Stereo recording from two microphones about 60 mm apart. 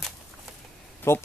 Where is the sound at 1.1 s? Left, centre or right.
Left.